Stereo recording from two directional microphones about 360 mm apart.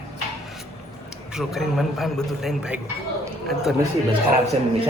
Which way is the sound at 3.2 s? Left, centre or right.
Centre.